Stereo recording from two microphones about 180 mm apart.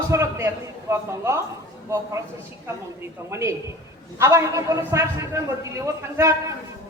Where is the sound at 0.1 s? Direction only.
15° right (ahead or behind).